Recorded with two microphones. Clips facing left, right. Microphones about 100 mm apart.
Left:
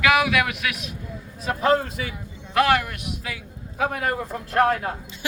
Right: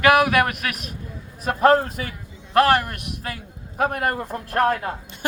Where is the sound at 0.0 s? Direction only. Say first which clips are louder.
Right 3 dB; 50° right (ahead or behind).